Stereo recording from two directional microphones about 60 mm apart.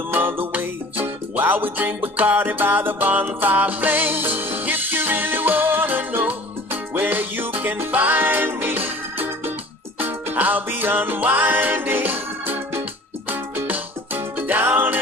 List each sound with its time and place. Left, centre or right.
0.1 s music: right